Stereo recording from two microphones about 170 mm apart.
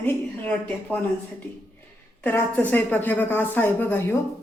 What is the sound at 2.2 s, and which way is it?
A woman's voice, 10° left (ahead or behind).